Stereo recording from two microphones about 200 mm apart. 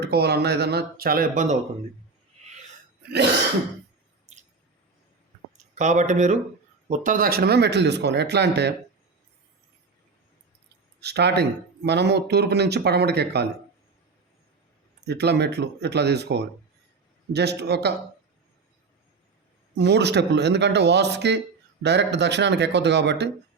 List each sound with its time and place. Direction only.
0.0 s speech: 55° right (ahead or behind)
2.4 s a sound: 35° right (ahead or behind)
5.7 s speech: 35° right (ahead or behind); by 8.7 s 55° right (ahead or behind)
11.0 s speech: 55° right (ahead or behind)
15.0 s speech: 55° right (ahead or behind)
19.7 s speech: 60° right (ahead or behind)